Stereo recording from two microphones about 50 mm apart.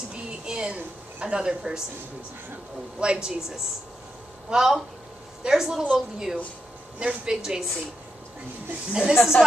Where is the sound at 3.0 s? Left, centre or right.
Centre.